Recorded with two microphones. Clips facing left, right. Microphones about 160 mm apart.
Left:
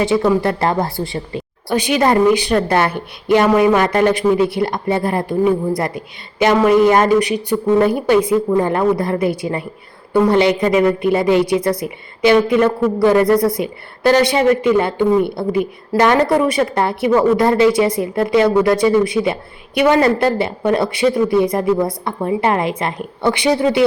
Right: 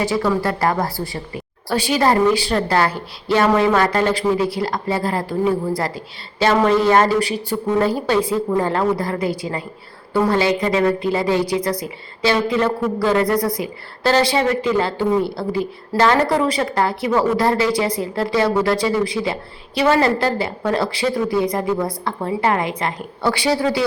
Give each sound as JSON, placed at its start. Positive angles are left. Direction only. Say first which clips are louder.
{"t": 0.0, "sound": "a woman's voice", "louder": "left 4 dB", "side_deg": 25}